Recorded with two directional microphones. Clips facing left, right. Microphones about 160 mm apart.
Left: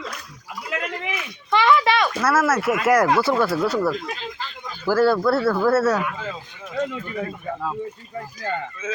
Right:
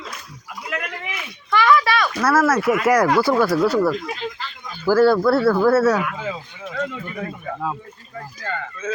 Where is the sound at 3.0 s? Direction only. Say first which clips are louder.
Right 2 dB; 25° left (ahead or behind).